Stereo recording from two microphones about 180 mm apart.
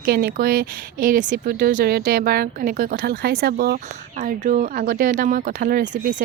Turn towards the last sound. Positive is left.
turn(degrees=-45)  # may be behind; listen again after turning